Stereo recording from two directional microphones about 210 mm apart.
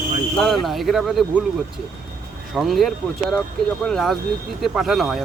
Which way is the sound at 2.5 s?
Centre (ahead or behind).